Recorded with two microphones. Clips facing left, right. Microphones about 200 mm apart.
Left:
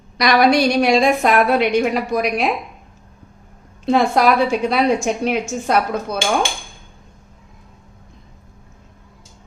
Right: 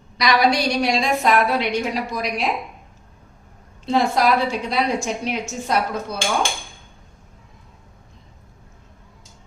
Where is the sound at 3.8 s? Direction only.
60° left (ahead or behind).